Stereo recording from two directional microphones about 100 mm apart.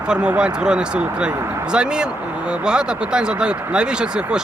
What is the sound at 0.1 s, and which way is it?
Speech, 10° right (ahead or behind).